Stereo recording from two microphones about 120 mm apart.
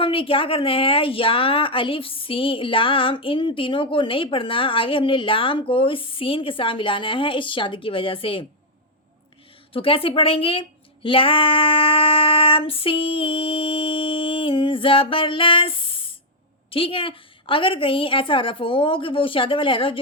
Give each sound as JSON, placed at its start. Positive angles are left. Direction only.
{"t": 0.0, "sound": "a woman's voice", "side_deg": 50}
{"t": 9.7, "sound": "a woman's voice", "side_deg": 50}